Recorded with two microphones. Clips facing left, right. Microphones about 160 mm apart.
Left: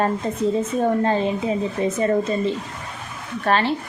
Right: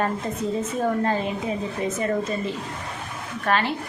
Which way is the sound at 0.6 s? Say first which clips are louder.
Left 1 dB; 30° left (ahead or behind).